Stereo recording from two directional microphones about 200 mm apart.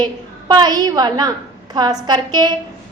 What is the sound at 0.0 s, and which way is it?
A woman's voice, 20° right (ahead or behind).